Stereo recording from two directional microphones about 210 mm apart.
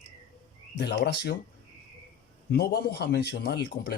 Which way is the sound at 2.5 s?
50° left (ahead or behind).